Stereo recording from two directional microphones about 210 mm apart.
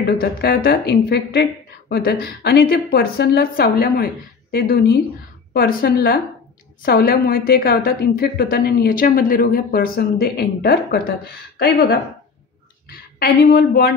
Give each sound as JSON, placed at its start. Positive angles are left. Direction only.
{"t": 0.0, "sound": "speech", "side_deg": 45}
{"t": 13.2, "sound": "speech", "side_deg": 45}